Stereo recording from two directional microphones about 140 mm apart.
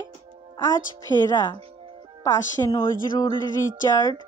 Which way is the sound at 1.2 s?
30° left (ahead or behind).